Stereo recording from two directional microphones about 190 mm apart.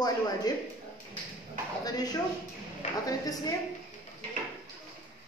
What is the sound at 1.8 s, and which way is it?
A woman's voice, 20° left (ahead or behind).